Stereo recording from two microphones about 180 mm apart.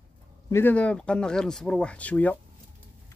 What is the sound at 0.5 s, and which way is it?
Speech, 10° left (ahead or behind).